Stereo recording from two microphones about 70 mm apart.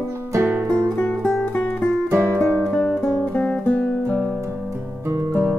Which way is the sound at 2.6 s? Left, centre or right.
Centre.